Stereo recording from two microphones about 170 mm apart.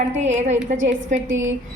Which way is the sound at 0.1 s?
40° right (ahead or behind).